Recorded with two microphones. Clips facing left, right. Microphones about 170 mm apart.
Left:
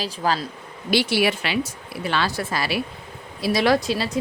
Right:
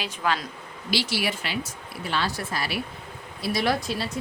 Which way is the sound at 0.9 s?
60° left (ahead or behind).